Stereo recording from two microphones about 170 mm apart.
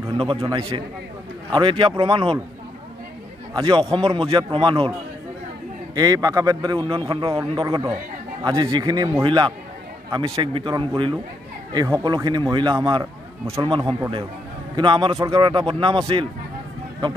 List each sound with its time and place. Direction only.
0.4 s speech: 25° right (ahead or behind)
3.5 s speech: 25° right (ahead or behind)
5.9 s speech: 25° right (ahead or behind)